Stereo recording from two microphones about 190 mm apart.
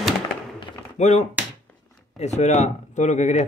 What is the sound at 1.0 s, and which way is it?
Speech, 35° left (ahead or behind).